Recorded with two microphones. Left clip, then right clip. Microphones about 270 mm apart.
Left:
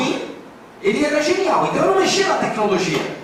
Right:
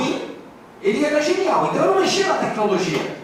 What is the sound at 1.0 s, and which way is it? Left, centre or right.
Speech, centre.